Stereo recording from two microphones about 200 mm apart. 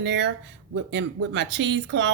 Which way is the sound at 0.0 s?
60° right (ahead or behind).